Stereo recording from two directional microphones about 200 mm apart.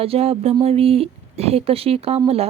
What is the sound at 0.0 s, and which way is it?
Speech, 30° right (ahead or behind).